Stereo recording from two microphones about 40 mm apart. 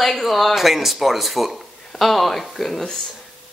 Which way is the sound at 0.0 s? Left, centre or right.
Centre.